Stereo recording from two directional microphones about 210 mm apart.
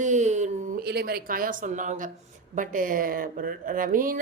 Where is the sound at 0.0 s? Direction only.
35° right (ahead or behind).